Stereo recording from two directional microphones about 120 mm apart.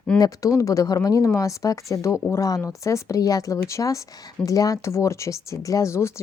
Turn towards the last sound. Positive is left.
turn(degrees=25)  # may be behind; listen again after turning